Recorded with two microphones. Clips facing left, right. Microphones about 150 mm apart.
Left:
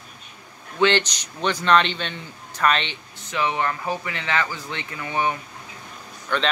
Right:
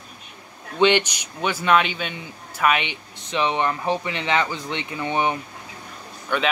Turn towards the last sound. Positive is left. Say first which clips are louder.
# right 1 dB
turn(degrees=-10)  # may be behind; listen again after turning